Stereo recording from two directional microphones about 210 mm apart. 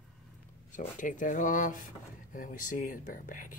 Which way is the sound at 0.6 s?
35° left (ahead or behind).